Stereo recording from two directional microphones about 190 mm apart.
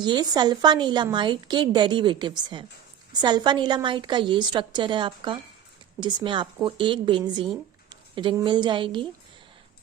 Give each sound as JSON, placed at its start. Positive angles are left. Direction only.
{"t": 0.0, "sound": "a woman's voice", "side_deg": -20}